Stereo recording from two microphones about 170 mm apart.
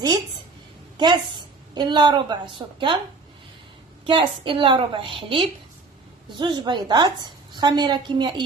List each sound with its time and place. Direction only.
0.9 s a woman's voice: 25° right (ahead or behind)
4.0 s a woman's voice: 30° right (ahead or behind)